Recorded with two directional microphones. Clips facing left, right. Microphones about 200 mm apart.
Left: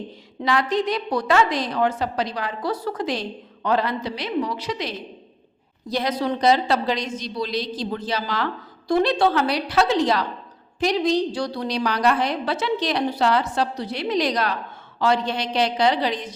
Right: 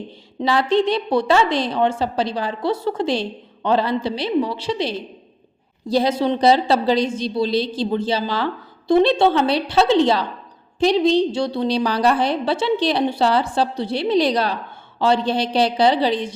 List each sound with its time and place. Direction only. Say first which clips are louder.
0.3 s a woman's voice: right 4 dB; 30° right (ahead or behind)